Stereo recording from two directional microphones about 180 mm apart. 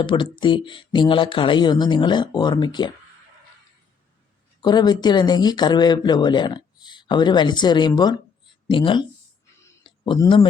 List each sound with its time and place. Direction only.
0.0 s speech: 25° left (ahead or behind)
4.6 s speech: 25° left (ahead or behind)
9.8 s a sound: 25° left (ahead or behind)